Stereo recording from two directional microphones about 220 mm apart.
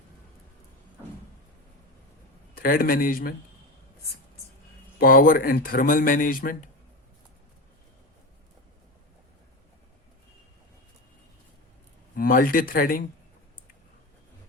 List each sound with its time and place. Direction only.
2.6 s speech: 40° left (ahead or behind)
4.9 s speech: 40° left (ahead or behind)
12.1 s speech: 40° left (ahead or behind)